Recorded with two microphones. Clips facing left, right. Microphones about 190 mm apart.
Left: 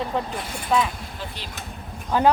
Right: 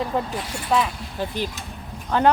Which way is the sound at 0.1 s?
5° right (ahead or behind).